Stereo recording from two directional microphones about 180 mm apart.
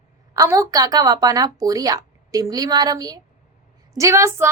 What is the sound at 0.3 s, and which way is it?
A woman's voice, 20° right (ahead or behind).